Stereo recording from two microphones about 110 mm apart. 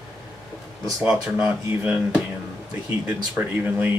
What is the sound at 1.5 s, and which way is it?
Speech, 10° right (ahead or behind).